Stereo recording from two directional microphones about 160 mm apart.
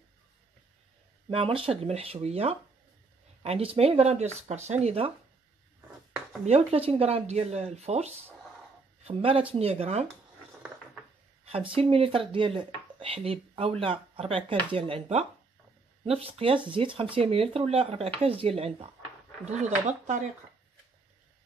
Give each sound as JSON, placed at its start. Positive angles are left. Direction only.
{"t": 1.3, "sound": "speech", "side_deg": -35}
{"t": 6.4, "sound": "speech", "side_deg": -40}
{"t": 11.7, "sound": "speech", "side_deg": -35}